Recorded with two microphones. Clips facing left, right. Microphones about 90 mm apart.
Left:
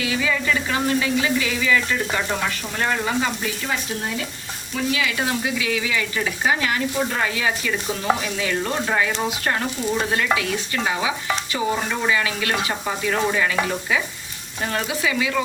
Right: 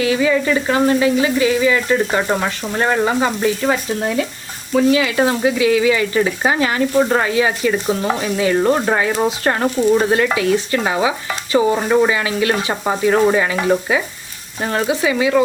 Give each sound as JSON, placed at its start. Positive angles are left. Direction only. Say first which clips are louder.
{"t": 0.0, "sound": "frying", "louder": "right 8 dB", "side_deg": -35}
{"t": 4.7, "sound": "frying", "louder": "right 10 dB", "side_deg": -40}
{"t": 8.7, "sound": "speech", "louder": "right 5 dB", "side_deg": -45}
{"t": 9.4, "sound": "frying", "louder": "right 8 dB", "side_deg": -40}
{"t": 14.6, "sound": "frying", "louder": "right 6 dB", "side_deg": -35}